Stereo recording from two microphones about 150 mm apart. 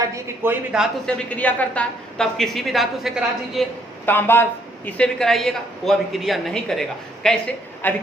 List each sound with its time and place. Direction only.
0.1 s speech: 15° right (ahead or behind)
1.0 s speech: 10° left (ahead or behind)
4.0 s speech: 15° left (ahead or behind)